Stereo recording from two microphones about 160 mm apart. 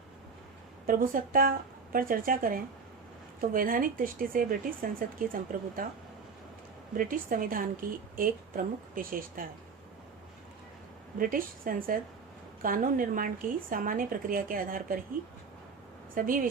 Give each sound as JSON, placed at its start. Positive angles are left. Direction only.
{"t": 0.9, "sound": "a woman's voice", "side_deg": -60}
{"t": 6.9, "sound": "a woman's voice", "side_deg": -60}
{"t": 11.2, "sound": "a woman's voice", "side_deg": -60}
{"t": 16.1, "sound": "a woman's voice", "side_deg": -60}